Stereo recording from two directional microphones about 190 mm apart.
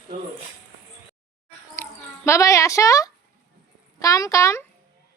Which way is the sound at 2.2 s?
15° left (ahead or behind).